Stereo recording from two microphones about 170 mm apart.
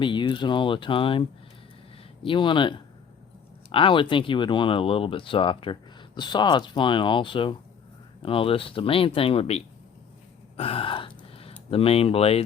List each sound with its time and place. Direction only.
0.0 s speech: 30° left (ahead or behind)
2.2 s speech: 30° left (ahead or behind)
10.6 s gasp: 35° left (ahead or behind)
11.7 s speech: 35° left (ahead or behind)